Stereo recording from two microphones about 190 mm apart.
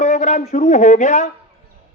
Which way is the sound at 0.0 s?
40° left (ahead or behind).